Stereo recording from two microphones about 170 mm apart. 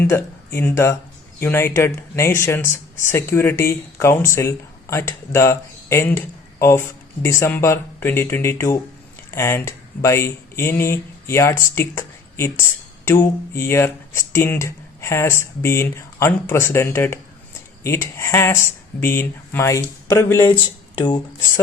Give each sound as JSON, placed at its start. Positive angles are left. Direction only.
{"t": 0.0, "sound": "speech", "side_deg": 15}